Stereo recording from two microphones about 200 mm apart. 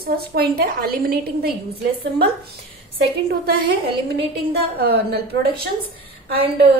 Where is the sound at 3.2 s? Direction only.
55° right (ahead or behind).